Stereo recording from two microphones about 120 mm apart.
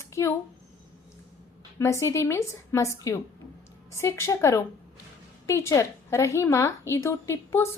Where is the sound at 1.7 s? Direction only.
25° left (ahead or behind).